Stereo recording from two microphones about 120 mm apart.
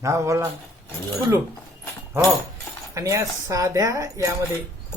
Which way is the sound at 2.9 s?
25° right (ahead or behind).